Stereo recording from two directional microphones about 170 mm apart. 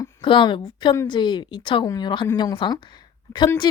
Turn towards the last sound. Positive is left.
turn(degrees=25)  # may be behind; listen again after turning